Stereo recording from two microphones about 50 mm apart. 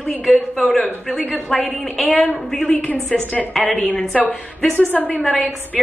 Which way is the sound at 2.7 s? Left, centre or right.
Left.